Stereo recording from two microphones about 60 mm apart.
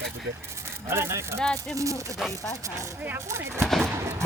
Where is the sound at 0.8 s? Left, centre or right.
Right.